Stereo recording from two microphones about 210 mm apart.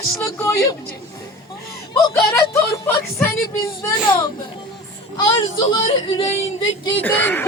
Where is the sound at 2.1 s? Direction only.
15° left (ahead or behind).